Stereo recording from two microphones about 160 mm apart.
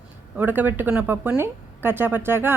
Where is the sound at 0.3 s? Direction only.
10° right (ahead or behind).